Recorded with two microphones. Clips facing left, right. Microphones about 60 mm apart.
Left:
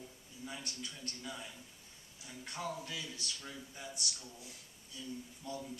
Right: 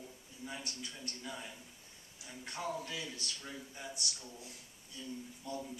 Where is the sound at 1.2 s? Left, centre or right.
Centre.